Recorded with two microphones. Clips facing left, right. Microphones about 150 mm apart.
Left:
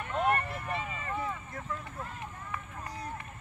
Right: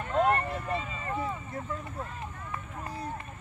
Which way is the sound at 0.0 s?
30° right (ahead or behind).